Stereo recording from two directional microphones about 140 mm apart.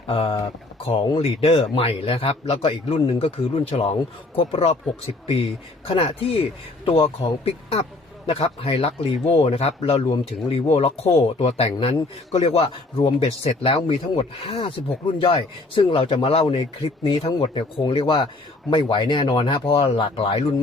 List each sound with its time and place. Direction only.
0.1 s speech: 40° left (ahead or behind)